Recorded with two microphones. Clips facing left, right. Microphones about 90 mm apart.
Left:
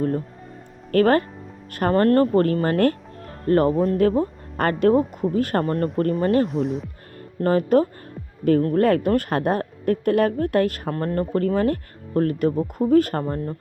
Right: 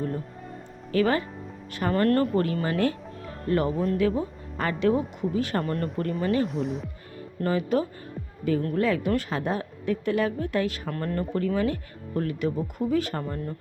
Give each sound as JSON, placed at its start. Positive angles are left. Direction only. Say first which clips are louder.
{"t": 0.9, "sound": "speech", "louder": "left 6 dB", "side_deg": 50}
{"t": 1.9, "sound": "speech", "louder": "left 5 dB", "side_deg": 35}
{"t": 6.5, "sound": "speech", "louder": "left 5 dB", "side_deg": 0}
{"t": 7.4, "sound": "speech", "louder": "left 7 dB", "side_deg": 45}
{"t": 10.9, "sound": "speech", "louder": "left 5 dB", "side_deg": 40}